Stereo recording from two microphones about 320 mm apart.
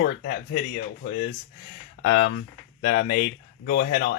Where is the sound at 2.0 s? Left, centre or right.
Left.